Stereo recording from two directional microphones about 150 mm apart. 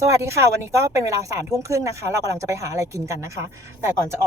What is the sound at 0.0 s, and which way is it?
Speech, 20° right (ahead or behind).